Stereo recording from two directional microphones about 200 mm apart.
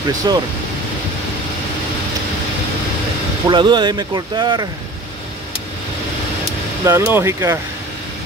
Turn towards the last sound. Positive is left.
turn(degrees=-15)  # may be behind; listen again after turning